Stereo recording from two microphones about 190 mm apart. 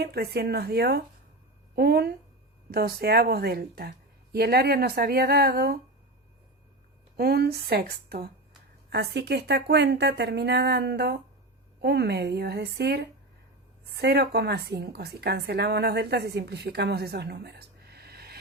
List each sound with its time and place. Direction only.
0.0 s a woman's voice: 55° right (ahead or behind)
7.2 s a woman's voice: 55° right (ahead or behind)